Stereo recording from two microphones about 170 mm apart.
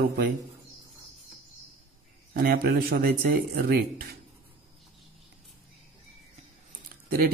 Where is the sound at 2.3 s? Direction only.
60° right (ahead or behind).